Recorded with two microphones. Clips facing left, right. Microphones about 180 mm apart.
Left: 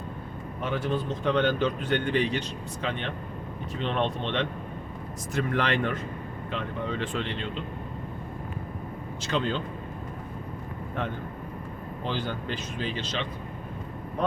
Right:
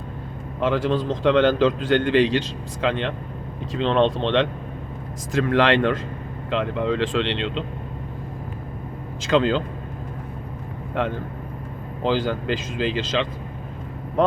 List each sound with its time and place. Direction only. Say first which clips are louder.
0.6 s a man's voice: right 8 dB; 90° right
9.2 s a man's voice: right 9 dB; 90° right
11.0 s a man's voice: right 8 dB; 90° right